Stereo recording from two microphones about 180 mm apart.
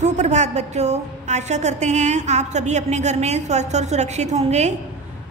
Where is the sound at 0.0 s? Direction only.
40° right (ahead or behind).